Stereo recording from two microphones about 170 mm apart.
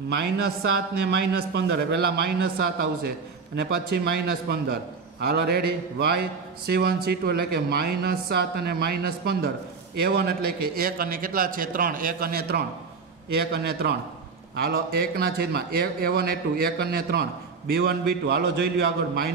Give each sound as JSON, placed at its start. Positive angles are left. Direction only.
{"t": 1.0, "sound": "a man's voice", "side_deg": -90}